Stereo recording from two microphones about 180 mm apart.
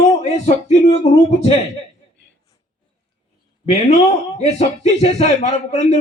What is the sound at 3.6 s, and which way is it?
Speech, 35° left (ahead or behind).